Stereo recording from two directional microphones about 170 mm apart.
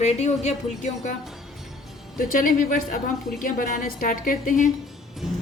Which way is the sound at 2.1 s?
55° left (ahead or behind).